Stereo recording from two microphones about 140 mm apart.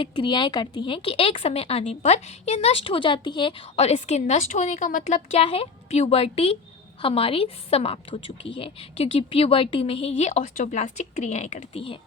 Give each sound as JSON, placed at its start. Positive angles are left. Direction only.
{"t": 0.0, "sound": "speech", "side_deg": 35}
{"t": 3.8, "sound": "a woman's voice", "side_deg": 50}